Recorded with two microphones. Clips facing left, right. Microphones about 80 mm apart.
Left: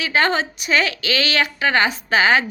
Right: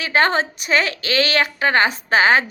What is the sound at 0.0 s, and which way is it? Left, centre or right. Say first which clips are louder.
A woman's voice: right 1 dB; right.